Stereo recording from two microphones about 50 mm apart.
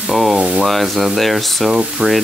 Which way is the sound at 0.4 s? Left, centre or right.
Right.